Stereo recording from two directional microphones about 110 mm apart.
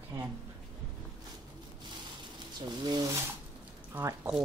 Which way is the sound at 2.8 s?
40° right (ahead or behind).